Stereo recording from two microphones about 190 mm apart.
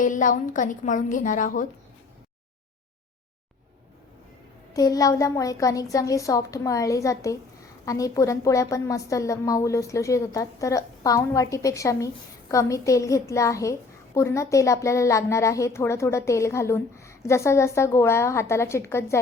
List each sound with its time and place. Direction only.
0.0 s a woman's voice: 45° left (ahead or behind)
4.7 s a woman's voice: 20° left (ahead or behind)